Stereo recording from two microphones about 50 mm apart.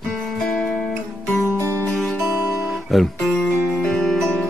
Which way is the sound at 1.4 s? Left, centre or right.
Right.